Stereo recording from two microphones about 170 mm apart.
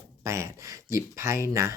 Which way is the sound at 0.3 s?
15° right (ahead or behind).